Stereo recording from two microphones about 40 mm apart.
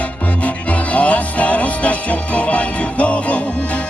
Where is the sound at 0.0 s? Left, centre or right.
Left.